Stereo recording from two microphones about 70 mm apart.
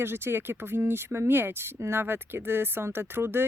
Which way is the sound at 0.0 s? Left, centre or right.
Right.